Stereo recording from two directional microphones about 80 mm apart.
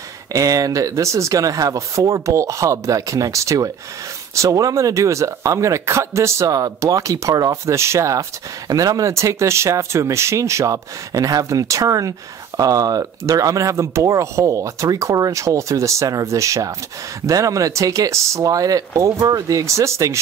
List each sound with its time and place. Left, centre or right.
0.3 s speech: right